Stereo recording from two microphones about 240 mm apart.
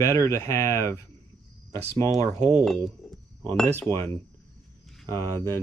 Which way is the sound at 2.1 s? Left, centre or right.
Right.